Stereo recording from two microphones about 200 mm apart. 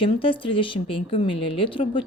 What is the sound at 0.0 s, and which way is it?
A woman's voice, 25° left (ahead or behind).